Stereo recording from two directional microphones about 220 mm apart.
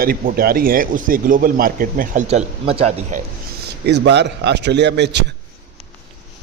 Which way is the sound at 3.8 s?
50° right (ahead or behind).